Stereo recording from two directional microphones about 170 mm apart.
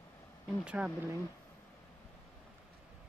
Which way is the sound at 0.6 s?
5° right (ahead or behind).